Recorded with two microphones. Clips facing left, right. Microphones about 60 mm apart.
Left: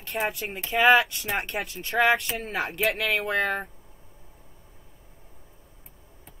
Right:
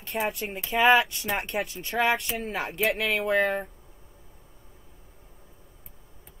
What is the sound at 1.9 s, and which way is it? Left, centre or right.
Speech, left.